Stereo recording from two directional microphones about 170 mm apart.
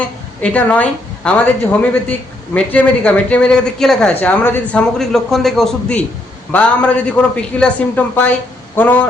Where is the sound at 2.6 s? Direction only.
10° left (ahead or behind).